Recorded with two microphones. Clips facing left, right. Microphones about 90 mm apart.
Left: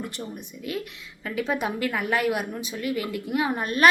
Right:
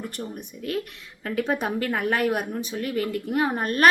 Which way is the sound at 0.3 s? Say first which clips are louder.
Right 4 dB; 50° right (ahead or behind).